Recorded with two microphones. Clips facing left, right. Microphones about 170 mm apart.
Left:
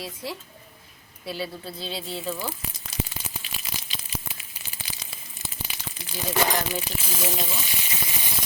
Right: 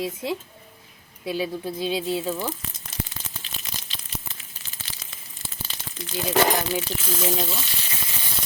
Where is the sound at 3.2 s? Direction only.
10° left (ahead or behind).